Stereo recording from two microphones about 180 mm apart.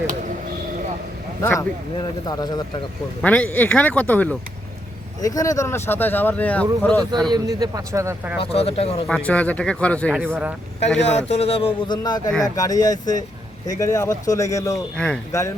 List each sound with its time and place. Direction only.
1.4 s speech: 15° left (ahead or behind)
3.2 s speech: 10° left (ahead or behind)
5.2 s speech: 20° left (ahead or behind)
7.3 s speech: 20° right (ahead or behind)
8.5 s a man's voice: 35° left (ahead or behind)
9.0 s speech: 5° left (ahead or behind)
10.1 s speech: 5° right (ahead or behind)
11.3 s a man's voice: 35° left (ahead or behind); by 14.8 s 15° left (ahead or behind)
14.9 s speech: 5° left (ahead or behind)
15.3 s speech: 15° left (ahead or behind)